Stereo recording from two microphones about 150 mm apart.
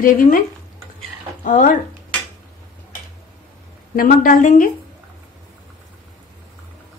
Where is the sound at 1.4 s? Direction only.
60° left (ahead or behind).